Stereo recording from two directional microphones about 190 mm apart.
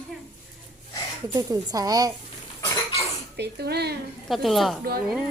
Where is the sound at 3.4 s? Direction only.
60° right (ahead or behind).